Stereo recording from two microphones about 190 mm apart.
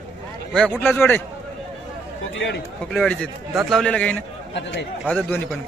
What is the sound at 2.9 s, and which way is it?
A man's voice, 5° left (ahead or behind).